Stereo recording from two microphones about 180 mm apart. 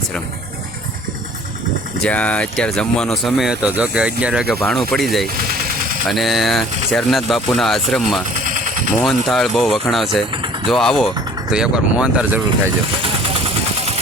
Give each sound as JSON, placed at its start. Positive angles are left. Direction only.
{"t": 2.0, "sound": "speech", "side_deg": 5}
{"t": 10.3, "sound": "vehicle", "side_deg": -25}
{"t": 10.7, "sound": "speech", "side_deg": 0}